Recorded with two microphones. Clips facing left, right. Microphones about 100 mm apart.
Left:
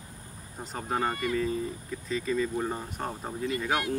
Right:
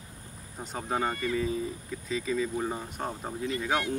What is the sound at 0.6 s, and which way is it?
Speech, centre (ahead or behind).